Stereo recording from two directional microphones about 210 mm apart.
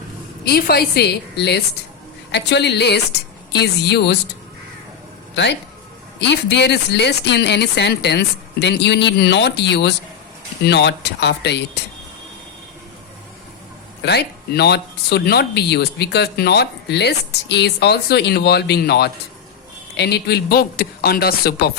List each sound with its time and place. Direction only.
0.4 s speech: 50° left (ahead or behind)
5.3 s speech: 55° left (ahead or behind)
14.0 s speech: 50° left (ahead or behind)